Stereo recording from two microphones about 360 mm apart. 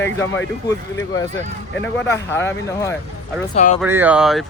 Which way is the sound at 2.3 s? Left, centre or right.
Centre.